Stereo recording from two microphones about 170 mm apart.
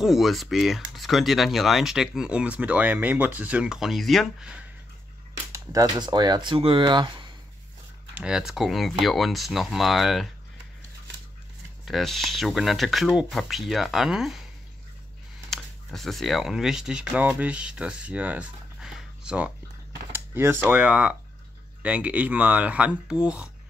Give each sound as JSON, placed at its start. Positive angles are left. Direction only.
{"t": 0.0, "sound": "speech", "side_deg": 0}
{"t": 5.5, "sound": "speech", "side_deg": -20}
{"t": 8.1, "sound": "speech", "side_deg": -5}
{"t": 11.8, "sound": "speech", "side_deg": 0}
{"t": 15.5, "sound": "speech", "side_deg": 0}